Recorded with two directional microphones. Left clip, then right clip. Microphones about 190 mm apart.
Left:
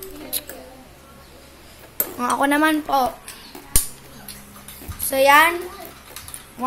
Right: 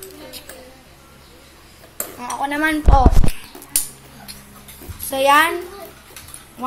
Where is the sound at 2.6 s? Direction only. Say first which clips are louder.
Right 1 dB; 15° left (ahead or behind).